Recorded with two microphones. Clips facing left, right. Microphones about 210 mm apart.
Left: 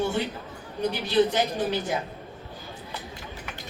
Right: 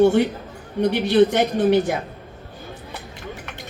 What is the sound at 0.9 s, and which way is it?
Speech, 70° right (ahead or behind).